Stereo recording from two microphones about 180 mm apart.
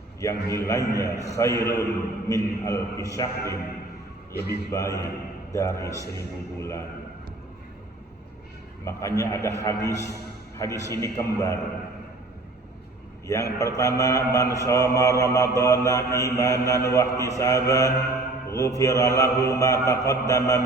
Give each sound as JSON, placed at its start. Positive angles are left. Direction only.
{"t": 0.2, "sound": "mantra", "side_deg": 15}
{"t": 4.4, "sound": "a man's voice", "side_deg": 65}
{"t": 4.7, "sound": "mantra", "side_deg": 20}
{"t": 8.8, "sound": "mantra", "side_deg": 15}
{"t": 13.2, "sound": "mantra", "side_deg": 15}